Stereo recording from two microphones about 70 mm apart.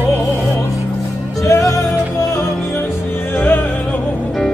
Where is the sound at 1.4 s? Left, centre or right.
Left.